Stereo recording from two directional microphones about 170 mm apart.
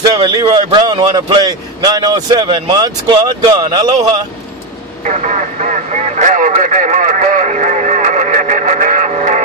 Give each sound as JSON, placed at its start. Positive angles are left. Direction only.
{"t": 0.1, "sound": "a man's voice", "side_deg": -25}
{"t": 5.0, "sound": "speech", "side_deg": -45}